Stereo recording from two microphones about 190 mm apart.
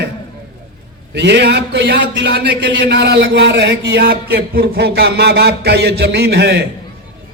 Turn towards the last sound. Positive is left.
turn(degrees=-60)  # may be behind; listen again after turning